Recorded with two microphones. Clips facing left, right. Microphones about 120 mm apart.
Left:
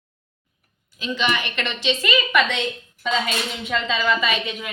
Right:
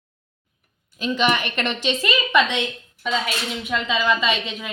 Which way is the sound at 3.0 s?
5° right (ahead or behind).